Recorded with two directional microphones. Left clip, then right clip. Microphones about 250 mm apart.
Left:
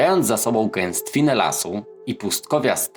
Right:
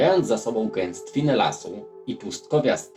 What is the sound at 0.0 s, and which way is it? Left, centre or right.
Speech, left.